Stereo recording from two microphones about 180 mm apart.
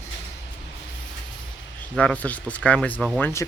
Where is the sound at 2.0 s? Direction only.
10° left (ahead or behind).